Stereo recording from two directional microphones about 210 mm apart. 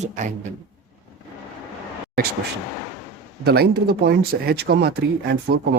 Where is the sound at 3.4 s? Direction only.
50° right (ahead or behind).